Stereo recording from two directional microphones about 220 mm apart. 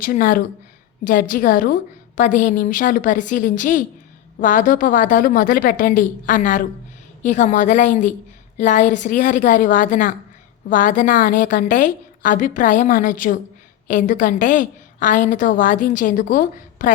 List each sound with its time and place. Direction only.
0.0 s a woman's voice: 40° left (ahead or behind)